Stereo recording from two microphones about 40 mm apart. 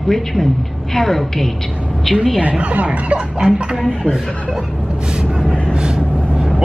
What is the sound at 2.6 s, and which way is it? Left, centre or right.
Speech, right.